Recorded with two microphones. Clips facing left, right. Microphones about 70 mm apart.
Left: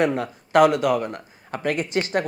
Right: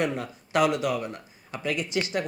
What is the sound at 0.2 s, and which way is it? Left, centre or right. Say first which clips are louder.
Speech: left 7 dB; left.